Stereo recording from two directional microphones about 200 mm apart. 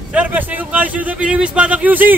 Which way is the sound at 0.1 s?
5° right (ahead or behind).